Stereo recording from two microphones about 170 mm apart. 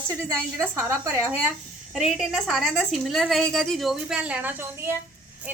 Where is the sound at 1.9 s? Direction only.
Centre (ahead or behind).